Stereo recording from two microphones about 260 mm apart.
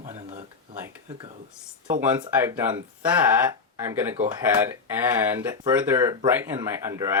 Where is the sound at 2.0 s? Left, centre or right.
Centre.